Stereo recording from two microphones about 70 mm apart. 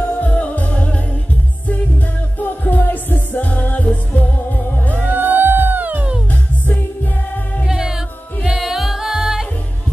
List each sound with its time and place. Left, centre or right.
0.0 s music: left
2.3 s music: left
5.1 s music: right
7.6 s music: centre